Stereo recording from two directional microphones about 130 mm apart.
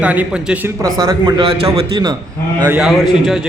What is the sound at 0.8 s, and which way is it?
A man's voice, 30° right (ahead or behind).